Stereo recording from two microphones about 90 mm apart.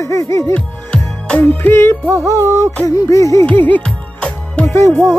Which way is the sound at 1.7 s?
25° left (ahead or behind).